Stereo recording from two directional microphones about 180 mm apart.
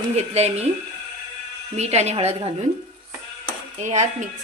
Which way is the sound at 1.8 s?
40° right (ahead or behind).